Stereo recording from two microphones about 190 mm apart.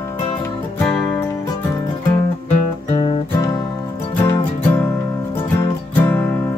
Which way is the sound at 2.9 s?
30° left (ahead or behind).